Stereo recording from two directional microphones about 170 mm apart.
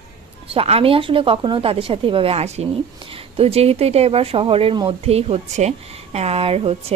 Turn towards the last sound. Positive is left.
turn(degrees=-35)  # may be behind; listen again after turning